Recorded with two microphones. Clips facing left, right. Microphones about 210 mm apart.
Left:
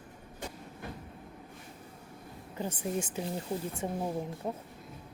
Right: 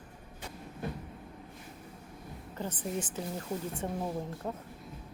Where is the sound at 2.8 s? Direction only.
10° left (ahead or behind).